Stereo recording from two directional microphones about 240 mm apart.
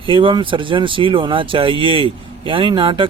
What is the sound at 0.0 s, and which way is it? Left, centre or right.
Speech, right.